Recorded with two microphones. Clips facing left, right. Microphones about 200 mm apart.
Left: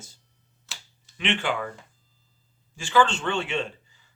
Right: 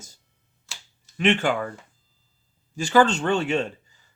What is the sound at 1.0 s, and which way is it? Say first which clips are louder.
Speech: right 6 dB; 45° right (ahead or behind).